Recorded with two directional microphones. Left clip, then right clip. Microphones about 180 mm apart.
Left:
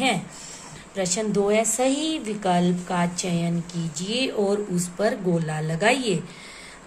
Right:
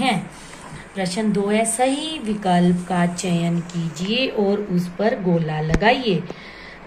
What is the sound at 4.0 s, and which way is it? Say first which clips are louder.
A woman's voice: right 4 dB; 65° left (ahead or behind).